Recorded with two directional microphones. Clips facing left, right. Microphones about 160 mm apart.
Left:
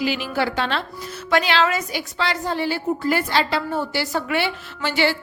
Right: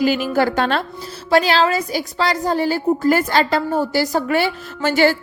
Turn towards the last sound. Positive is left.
turn(degrees=-45)  # may be behind; listen again after turning